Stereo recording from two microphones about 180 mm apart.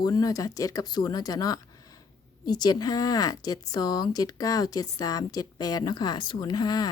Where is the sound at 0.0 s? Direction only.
20° left (ahead or behind).